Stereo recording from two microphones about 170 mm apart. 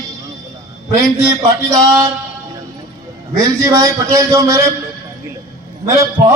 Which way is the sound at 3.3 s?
20° right (ahead or behind).